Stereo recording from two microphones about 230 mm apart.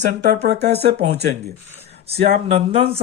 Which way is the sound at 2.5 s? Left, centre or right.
Right.